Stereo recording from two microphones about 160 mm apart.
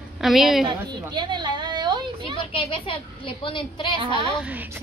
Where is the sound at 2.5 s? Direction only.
35° left (ahead or behind).